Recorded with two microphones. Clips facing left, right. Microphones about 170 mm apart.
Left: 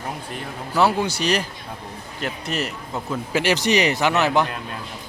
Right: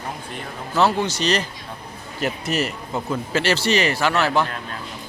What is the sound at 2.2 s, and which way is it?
Speech, 5° right (ahead or behind).